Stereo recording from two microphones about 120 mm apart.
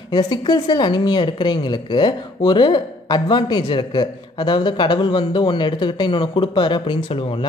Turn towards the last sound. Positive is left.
turn(degrees=45)  # may be behind; listen again after turning